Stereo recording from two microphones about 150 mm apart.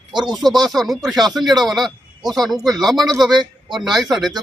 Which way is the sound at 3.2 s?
30° right (ahead or behind).